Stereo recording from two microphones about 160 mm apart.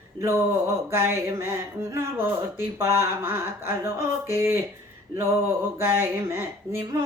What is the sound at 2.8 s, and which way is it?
Speech, 15° right (ahead or behind).